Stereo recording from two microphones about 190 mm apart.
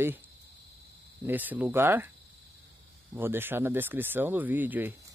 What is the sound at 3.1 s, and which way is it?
Speech, 10° right (ahead or behind).